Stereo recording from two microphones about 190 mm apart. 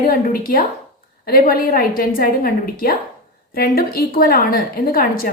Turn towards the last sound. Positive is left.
turn(degrees=50)  # may be behind; listen again after turning